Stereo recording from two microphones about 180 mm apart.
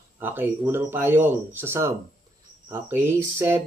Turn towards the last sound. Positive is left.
turn(degrees=-15)  # may be behind; listen again after turning